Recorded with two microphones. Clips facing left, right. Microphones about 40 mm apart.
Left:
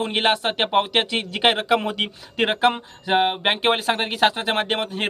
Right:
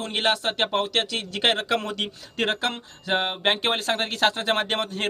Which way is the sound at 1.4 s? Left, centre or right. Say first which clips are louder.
Left 4 dB; centre.